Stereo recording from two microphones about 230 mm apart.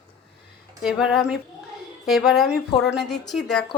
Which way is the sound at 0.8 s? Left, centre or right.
Centre.